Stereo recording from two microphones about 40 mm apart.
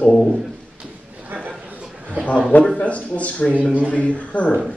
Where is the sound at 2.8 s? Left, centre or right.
Left.